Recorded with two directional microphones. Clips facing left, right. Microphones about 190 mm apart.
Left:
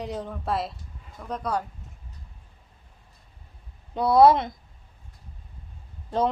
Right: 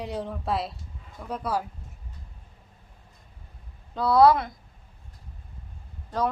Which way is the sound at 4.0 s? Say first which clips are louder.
Left 2 dB; 20° left (ahead or behind).